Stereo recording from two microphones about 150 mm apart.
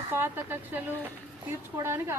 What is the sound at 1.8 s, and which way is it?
Speech, 15° right (ahead or behind).